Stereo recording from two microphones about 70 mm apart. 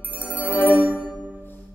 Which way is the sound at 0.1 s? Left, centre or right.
Right.